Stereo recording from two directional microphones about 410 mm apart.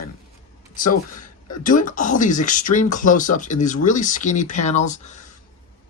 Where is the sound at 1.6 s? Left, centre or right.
Centre.